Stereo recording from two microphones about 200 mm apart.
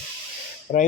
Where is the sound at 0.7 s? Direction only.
40° left (ahead or behind).